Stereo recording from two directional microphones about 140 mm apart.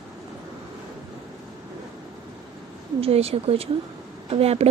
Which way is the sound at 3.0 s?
45° right (ahead or behind).